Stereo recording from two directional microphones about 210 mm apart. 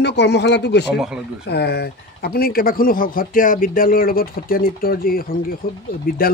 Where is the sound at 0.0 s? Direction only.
55° left (ahead or behind).